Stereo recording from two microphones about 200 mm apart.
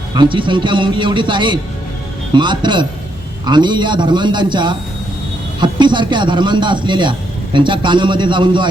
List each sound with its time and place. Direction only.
0.1 s a man's voice: 25° right (ahead or behind)